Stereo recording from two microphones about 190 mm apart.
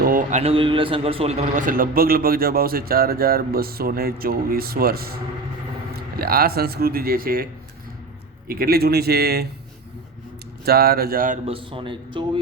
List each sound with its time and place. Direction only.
0.0 s a man's voice: 45° right (ahead or behind)
8.4 s a man's voice: 50° right (ahead or behind)
10.7 s a man's voice: 55° right (ahead or behind)
11.4 s a man's voice: 30° right (ahead or behind)